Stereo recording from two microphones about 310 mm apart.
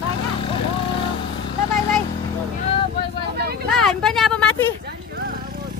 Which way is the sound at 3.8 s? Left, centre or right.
Centre.